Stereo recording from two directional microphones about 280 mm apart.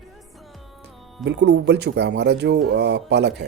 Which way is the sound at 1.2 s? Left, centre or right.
Right.